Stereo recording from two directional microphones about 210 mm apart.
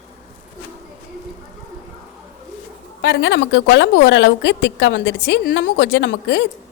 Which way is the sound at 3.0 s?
60° left (ahead or behind).